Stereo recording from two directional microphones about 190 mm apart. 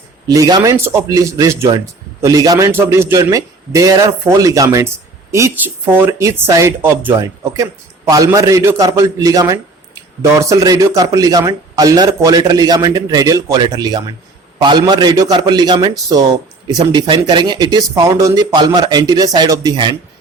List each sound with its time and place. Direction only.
0.3 s a man's voice: 20° right (ahead or behind)